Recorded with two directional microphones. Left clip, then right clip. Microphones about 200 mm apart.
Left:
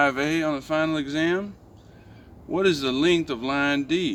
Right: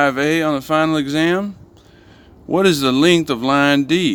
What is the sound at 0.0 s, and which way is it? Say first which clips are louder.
Speech: right 6 dB; 30° right (ahead or behind).